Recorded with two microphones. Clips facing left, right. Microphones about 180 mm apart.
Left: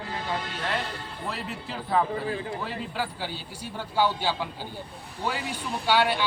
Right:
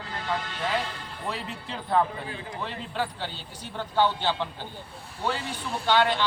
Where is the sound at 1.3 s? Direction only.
Centre (ahead or behind).